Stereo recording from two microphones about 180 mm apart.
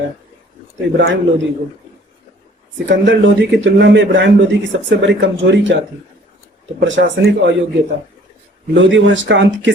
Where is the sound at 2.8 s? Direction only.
90° right.